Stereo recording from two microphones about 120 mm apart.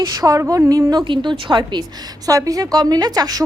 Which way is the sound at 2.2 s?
30° right (ahead or behind).